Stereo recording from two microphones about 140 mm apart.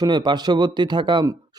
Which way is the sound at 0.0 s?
30° right (ahead or behind).